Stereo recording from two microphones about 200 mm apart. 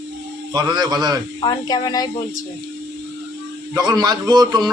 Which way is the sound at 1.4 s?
20° left (ahead or behind).